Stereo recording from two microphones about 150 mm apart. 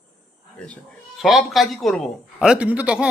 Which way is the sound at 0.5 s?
5° left (ahead or behind).